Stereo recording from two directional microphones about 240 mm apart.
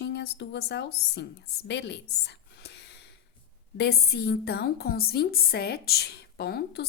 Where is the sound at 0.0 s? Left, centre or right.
Left.